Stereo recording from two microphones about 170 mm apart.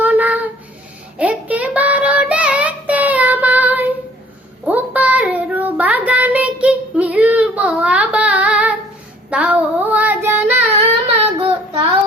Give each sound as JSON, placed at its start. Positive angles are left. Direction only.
{"t": 0.0, "sound": "a sound", "side_deg": -10}
{"t": 1.2, "sound": "child singing", "side_deg": -10}
{"t": 11.3, "sound": "child singing", "side_deg": -30}